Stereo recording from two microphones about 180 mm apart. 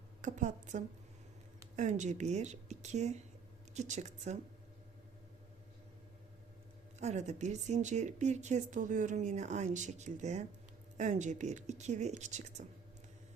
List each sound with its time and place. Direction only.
0.2 s a woman's voice: 40° right (ahead or behind)
7.0 s speech: 40° right (ahead or behind)